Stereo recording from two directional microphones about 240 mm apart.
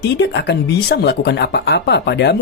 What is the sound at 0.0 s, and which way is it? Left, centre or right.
Speech, left.